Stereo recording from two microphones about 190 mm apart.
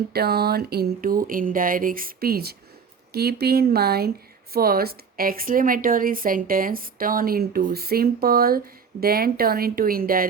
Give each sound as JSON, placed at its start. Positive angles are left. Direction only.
{"t": 0.1, "sound": "speech", "side_deg": -55}